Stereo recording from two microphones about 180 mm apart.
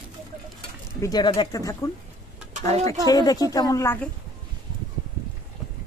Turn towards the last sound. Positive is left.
turn(degrees=15)  # may be behind; listen again after turning